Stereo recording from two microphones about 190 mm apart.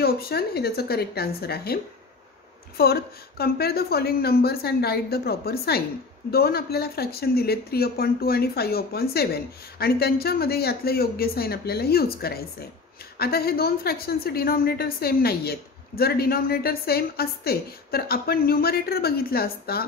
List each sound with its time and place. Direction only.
0.0 s speech: 55° left (ahead or behind)
2.8 s a woman's voice: 55° left (ahead or behind)